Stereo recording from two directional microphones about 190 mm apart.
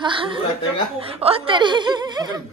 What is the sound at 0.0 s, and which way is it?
Chuckle, 25° right (ahead or behind).